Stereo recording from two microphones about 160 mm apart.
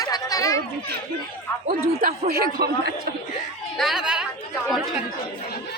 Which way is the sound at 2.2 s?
75° right (ahead or behind).